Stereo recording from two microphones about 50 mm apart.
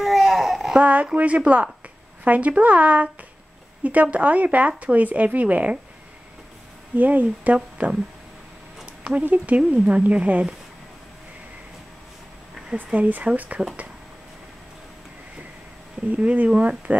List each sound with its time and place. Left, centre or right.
0.0 s a sound: centre
0.7 s speech: right
7.0 s speech: right
9.2 s speech: right
9.6 s speech: centre
12.7 s speech: right
16.2 s speech: right